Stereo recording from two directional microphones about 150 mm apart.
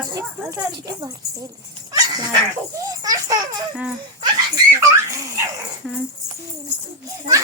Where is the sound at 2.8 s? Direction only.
25° right (ahead or behind).